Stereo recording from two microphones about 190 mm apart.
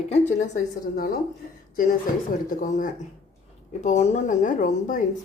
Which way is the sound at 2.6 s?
40° left (ahead or behind).